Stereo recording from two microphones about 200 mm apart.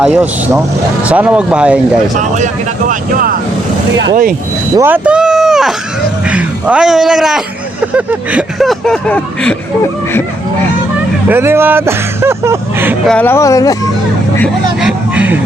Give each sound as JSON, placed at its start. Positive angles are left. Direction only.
{"t": 0.0, "sound": "speech", "side_deg": -5}
{"t": 2.1, "sound": "speech", "side_deg": -40}
{"t": 4.8, "sound": "speech", "side_deg": -5}
{"t": 11.3, "sound": "speech", "side_deg": -10}
{"t": 13.1, "sound": "speech", "side_deg": 10}
{"t": 14.8, "sound": "vehicle", "side_deg": -5}